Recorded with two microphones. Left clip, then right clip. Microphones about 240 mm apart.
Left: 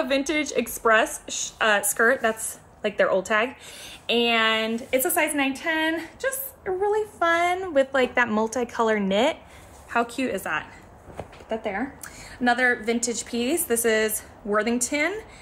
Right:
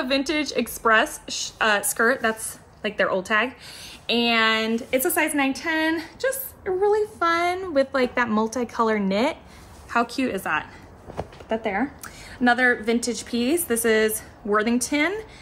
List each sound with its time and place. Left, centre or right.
0.0 s a woman's voice: centre